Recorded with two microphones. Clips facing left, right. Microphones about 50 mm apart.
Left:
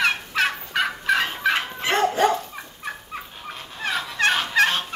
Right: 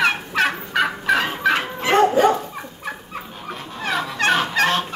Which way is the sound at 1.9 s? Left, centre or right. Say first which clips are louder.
Right 5 dB; right.